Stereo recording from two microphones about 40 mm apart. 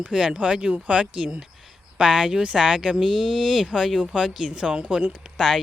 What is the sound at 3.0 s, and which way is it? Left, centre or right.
Speech, centre.